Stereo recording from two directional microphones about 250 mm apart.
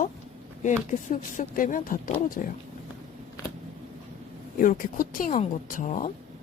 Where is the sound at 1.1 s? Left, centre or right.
Left.